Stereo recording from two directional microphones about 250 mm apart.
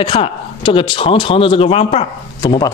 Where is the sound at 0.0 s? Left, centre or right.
Centre.